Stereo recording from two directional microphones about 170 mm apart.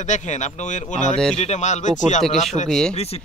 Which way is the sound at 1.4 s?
45° left (ahead or behind).